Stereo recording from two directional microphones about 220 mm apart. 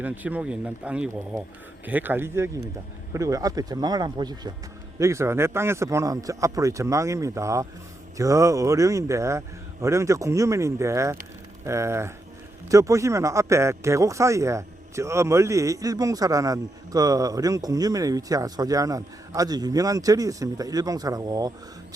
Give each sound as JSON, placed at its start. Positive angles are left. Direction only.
{"t": 0.0, "sound": "speech", "side_deg": -5}